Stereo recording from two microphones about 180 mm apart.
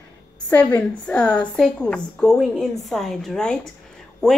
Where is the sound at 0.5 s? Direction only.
10° left (ahead or behind).